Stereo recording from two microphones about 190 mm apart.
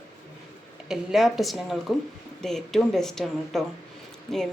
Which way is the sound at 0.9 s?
Centre (ahead or behind).